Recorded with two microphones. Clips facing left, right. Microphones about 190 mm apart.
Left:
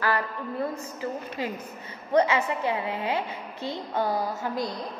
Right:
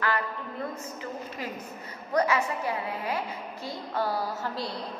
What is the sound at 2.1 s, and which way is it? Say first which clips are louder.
A woman's voice: left 3 dB; 25° left (ahead or behind).